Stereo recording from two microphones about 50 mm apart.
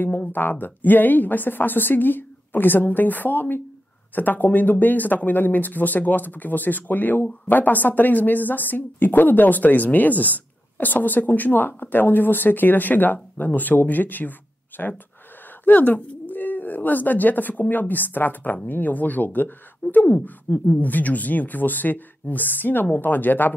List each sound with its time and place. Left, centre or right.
0.3 s a woman's voice: left